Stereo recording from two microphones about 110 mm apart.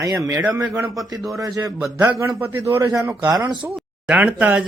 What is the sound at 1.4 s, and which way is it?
A man's voice, 30° right (ahead or behind).